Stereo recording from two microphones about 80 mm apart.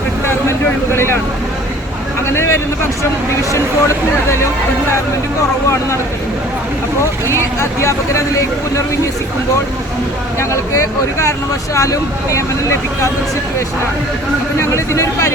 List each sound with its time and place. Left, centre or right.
0.9 s vehicle: left
2.3 s a sound: left
3.5 s speech: left
7.3 s speech: left
10.5 s speech: left
14.7 s speech: left